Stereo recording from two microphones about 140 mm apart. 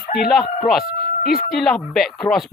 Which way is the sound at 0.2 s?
Centre (ahead or behind).